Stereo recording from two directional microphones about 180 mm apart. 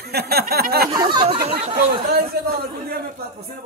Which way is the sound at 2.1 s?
55° right (ahead or behind).